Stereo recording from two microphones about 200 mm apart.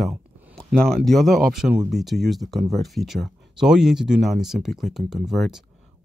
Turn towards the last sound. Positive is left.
turn(degrees=0)  # may be behind; listen again after turning